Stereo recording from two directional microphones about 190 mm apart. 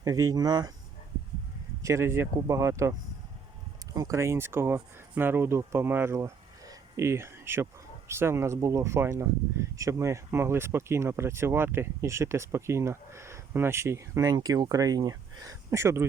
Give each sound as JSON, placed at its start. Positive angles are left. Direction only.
{"t": 0.0, "sound": "speech", "side_deg": -20}
{"t": 1.8, "sound": "speech", "side_deg": -15}
{"t": 3.9, "sound": "speech", "side_deg": -15}